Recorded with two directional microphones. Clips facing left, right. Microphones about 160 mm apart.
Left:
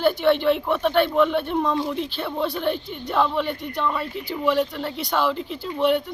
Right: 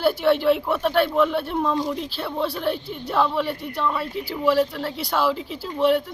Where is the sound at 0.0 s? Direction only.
5° right (ahead or behind).